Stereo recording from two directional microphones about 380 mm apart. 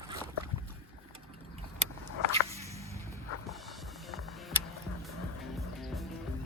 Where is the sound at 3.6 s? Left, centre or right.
Centre.